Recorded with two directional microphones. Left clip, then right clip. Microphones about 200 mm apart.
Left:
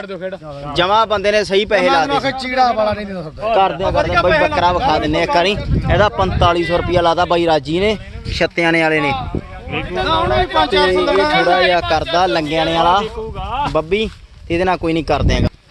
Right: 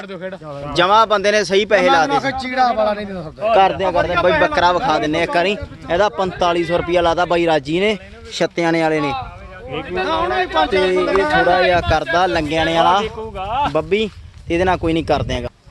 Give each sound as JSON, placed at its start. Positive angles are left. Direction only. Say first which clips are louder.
{"t": 0.7, "sound": "a man's voice", "louder": "right 1 dB", "side_deg": -10}
{"t": 2.0, "sound": "a man's voice", "louder": "left 1 dB", "side_deg": 20}
{"t": 3.5, "sound": "a man's voice", "louder": "even", "side_deg": -10}
{"t": 9.9, "sound": "speech", "louder": "left 3 dB", "side_deg": 30}
{"t": 11.7, "sound": "speech", "louder": "left 1 dB", "side_deg": 0}
{"t": 13.5, "sound": "a sound", "louder": "right 1 dB", "side_deg": -50}
{"t": 13.7, "sound": "speech", "louder": "left 1 dB", "side_deg": -5}